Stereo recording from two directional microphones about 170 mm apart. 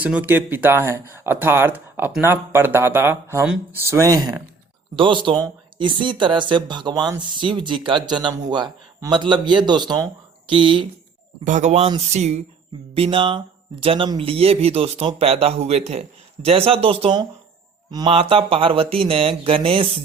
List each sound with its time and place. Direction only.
0.0 s speech: 10° right (ahead or behind); by 10.8 s 30° right (ahead or behind)
11.4 s speech: 45° right (ahead or behind)